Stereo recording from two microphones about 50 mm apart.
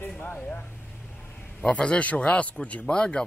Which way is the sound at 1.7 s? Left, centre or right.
Left.